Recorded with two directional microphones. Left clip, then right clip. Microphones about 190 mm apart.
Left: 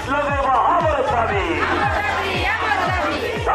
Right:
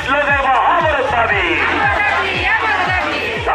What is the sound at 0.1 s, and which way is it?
Music, 20° right (ahead or behind).